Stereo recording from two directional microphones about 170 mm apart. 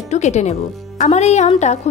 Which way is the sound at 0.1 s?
40° left (ahead or behind).